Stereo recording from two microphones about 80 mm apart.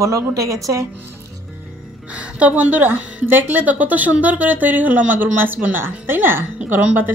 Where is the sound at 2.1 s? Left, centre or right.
Centre.